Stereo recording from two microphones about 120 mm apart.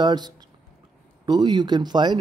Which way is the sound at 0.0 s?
35° right (ahead or behind).